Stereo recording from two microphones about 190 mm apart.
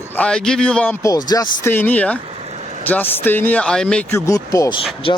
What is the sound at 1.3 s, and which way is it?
Speech, 20° left (ahead or behind).